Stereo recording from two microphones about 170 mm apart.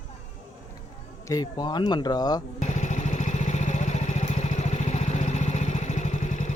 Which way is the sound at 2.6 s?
45° left (ahead or behind).